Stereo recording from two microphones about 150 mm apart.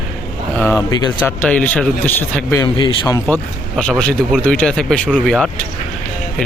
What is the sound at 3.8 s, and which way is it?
Speech, 10° left (ahead or behind).